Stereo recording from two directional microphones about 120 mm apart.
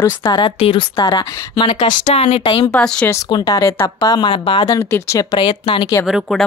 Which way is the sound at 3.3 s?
35° left (ahead or behind).